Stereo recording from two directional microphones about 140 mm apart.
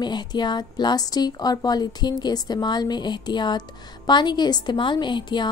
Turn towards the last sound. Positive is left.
turn(degrees=35)  # may be behind; listen again after turning